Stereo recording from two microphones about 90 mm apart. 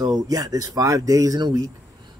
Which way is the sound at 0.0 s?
45° right (ahead or behind).